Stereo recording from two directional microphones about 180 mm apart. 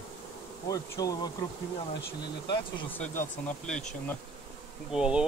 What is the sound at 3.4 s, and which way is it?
Bee, 5° left (ahead or behind).